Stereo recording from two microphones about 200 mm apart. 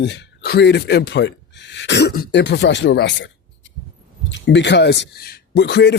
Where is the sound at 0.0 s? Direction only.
60° left (ahead or behind).